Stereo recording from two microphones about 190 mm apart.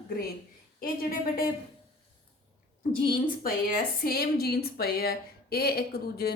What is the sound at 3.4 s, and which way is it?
Speech, 50° left (ahead or behind).